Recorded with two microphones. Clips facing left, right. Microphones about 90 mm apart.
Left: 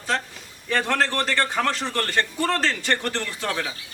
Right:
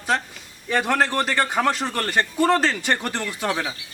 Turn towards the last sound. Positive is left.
turn(degrees=-20)  # may be behind; listen again after turning